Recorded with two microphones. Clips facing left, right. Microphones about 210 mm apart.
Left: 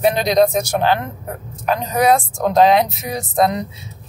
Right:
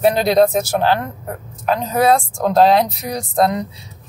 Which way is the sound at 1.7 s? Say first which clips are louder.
Right 1 dB; 15° left (ahead or behind).